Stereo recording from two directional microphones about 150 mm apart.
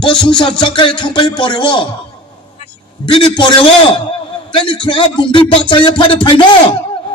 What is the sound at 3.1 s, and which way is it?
Speech, 35° left (ahead or behind).